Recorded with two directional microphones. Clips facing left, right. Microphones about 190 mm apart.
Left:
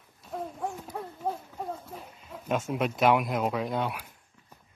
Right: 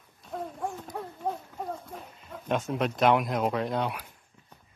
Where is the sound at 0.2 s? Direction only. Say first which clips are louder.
Even; 5° left (ahead or behind).